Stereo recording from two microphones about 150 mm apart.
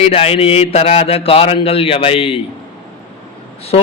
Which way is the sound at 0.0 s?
40° left (ahead or behind).